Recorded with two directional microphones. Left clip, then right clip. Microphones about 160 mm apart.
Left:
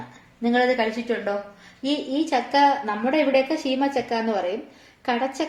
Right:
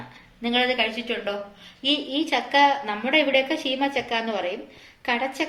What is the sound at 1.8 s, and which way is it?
A woman's voice, 50° left (ahead or behind).